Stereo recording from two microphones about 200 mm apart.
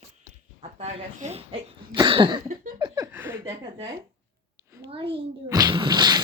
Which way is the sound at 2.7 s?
20° right (ahead or behind).